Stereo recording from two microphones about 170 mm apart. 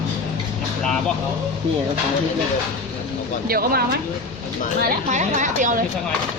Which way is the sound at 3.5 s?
60° right (ahead or behind).